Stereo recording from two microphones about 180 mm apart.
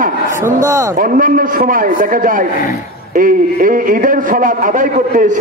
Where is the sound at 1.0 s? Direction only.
50° right (ahead or behind).